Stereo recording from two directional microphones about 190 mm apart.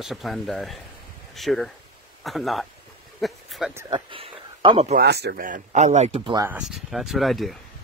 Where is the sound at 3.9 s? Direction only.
25° right (ahead or behind).